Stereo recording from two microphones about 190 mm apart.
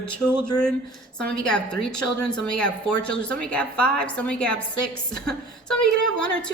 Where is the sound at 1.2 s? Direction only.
5° left (ahead or behind).